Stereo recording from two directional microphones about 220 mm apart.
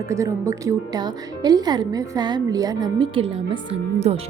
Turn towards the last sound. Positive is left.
turn(degrees=-25)  # may be behind; listen again after turning